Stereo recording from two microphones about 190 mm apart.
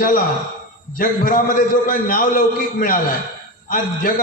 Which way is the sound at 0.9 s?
45° left (ahead or behind).